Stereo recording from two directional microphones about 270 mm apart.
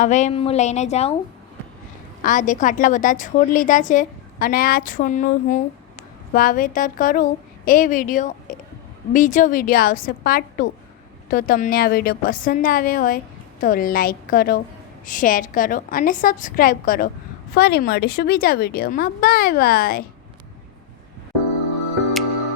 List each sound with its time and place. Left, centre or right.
0.0 s a woman's voice: left
2.2 s a woman's voice: left